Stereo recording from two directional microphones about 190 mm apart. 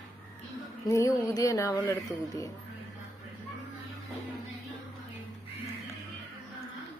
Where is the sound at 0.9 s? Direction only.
15° left (ahead or behind).